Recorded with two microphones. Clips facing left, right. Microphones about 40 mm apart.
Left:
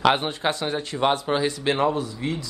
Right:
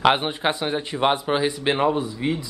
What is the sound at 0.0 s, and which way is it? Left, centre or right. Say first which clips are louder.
Speech: right 1 dB; centre.